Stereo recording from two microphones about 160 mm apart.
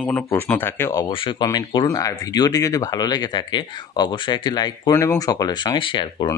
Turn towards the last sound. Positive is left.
turn(degrees=30)  # may be behind; listen again after turning